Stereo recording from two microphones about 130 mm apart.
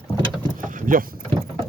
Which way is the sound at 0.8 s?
90° right.